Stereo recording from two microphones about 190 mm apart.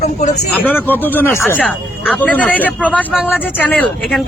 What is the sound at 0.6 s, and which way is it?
A man's voice, 10° left (ahead or behind).